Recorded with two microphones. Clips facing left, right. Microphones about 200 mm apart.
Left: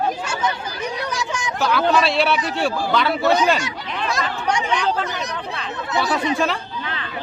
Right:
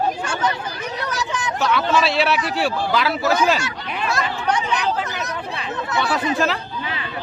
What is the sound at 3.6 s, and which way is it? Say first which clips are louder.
Speech: even; 15° left (ahead or behind).